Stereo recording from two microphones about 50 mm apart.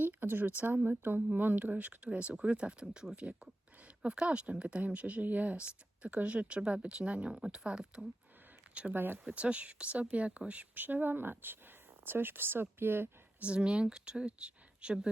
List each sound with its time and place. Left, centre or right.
0.0 s speech: right
2.0 s speech: right
8.9 s speech: right
9.3 s speech: right
10.8 s speech: right
13.4 s speech: right